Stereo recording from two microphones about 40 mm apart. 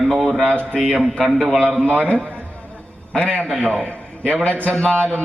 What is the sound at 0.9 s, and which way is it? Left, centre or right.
Speech, centre.